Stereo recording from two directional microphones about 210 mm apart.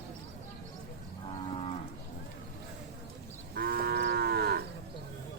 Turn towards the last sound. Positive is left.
turn(degrees=-50)  # may be behind; listen again after turning